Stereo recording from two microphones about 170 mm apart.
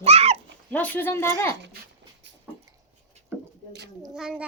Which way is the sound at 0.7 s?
10° left (ahead or behind).